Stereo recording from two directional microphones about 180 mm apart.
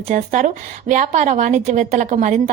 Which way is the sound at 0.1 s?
45° right (ahead or behind).